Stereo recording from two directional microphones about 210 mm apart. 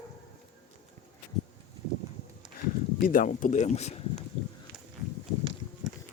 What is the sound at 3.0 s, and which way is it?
Speech, 40° left (ahead or behind).